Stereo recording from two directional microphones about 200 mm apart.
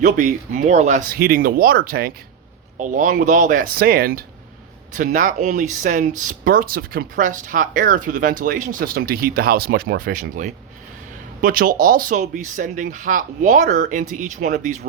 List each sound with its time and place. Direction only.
0.0 s speech: 40° right (ahead or behind)